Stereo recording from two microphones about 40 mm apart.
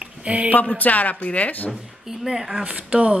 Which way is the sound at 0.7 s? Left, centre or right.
Left.